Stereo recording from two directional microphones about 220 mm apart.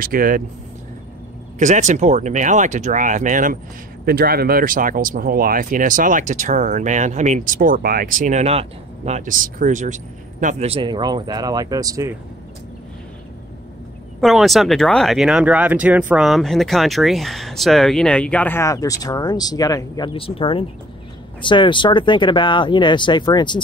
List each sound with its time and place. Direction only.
0.0 s speech: 40° right (ahead or behind)
1.6 s speech: 35° right (ahead or behind); by 12.1 s 15° right (ahead or behind)
14.2 s speech: centre (ahead or behind); by 23.6 s 20° left (ahead or behind)